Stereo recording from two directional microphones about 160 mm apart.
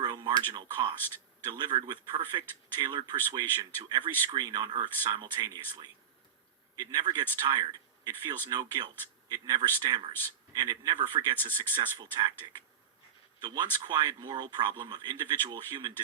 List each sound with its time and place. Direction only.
0.0 s a sound: 25° right (ahead or behind)
1.5 s speech: 30° right (ahead or behind)
13.4 s speech: 25° right (ahead or behind)